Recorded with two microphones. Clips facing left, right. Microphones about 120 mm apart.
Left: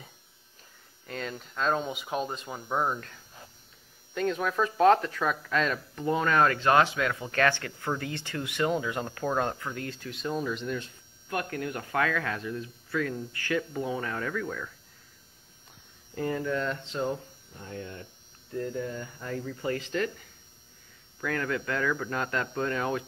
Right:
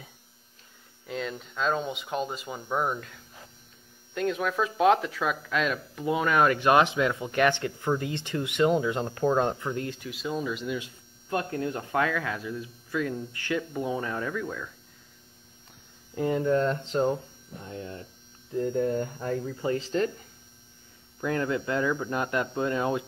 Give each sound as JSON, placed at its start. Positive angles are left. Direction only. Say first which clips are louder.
{"t": 1.0, "sound": "speech", "louder": "right 3 dB", "side_deg": 0}
{"t": 10.1, "sound": "speech", "louder": "left 1 dB", "side_deg": 0}
{"t": 11.2, "sound": "speech", "louder": "right 3 dB", "side_deg": -25}
{"t": 16.2, "sound": "speech", "louder": "right 5 dB", "side_deg": -20}
{"t": 16.5, "sound": "speech", "louder": "right 6 dB", "side_deg": -40}
{"t": 17.6, "sound": "speech", "louder": "right 1 dB", "side_deg": -30}
{"t": 18.5, "sound": "hum", "louder": "right 5 dB", "side_deg": -20}
{"t": 18.8, "sound": "speech", "louder": "right 8 dB", "side_deg": -45}
{"t": 19.8, "sound": "speech", "louder": "right 3 dB", "side_deg": -30}
{"t": 21.2, "sound": "speech", "louder": "right 3 dB", "side_deg": -20}